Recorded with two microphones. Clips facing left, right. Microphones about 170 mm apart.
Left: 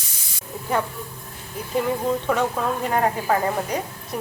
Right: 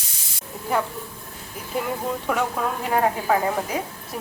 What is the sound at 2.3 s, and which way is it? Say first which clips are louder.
Speech: right 1 dB; 5° right (ahead or behind).